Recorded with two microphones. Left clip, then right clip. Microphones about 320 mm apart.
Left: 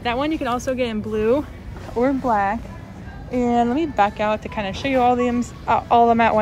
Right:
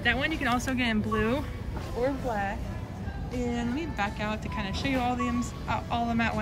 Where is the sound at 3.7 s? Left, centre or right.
Centre.